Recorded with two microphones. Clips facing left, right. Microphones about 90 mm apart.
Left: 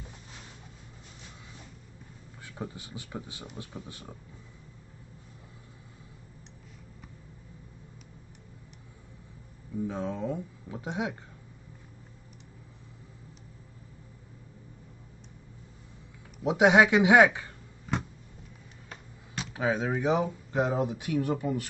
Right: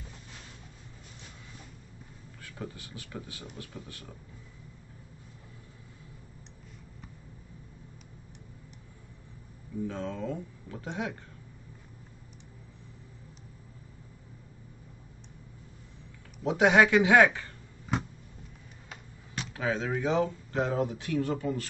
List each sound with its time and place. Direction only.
2.4 s speech: 20° left (ahead or behind)
9.8 s speech: 15° left (ahead or behind)
16.4 s speech: 15° left (ahead or behind)
17.9 s a sound: 5° right (ahead or behind)
19.5 s speech: 15° left (ahead or behind)